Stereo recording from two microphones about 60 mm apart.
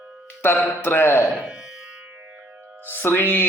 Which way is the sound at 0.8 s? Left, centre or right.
Left.